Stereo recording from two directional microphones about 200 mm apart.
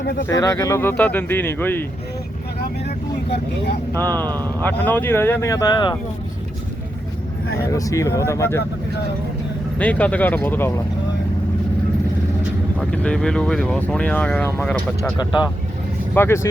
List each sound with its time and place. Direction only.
0.0 s speech: 55° left (ahead or behind)
0.3 s speech: 15° left (ahead or behind)
3.9 s speech: 10° left (ahead or behind)
4.3 s speech: 20° right (ahead or behind)
4.6 s speech: 10° left (ahead or behind)
7.6 s speech: 15° left (ahead or behind)
9.7 s speech: 5° left (ahead or behind)
12.8 s speech: 5° left (ahead or behind)
16.1 s speech: 10° left (ahead or behind)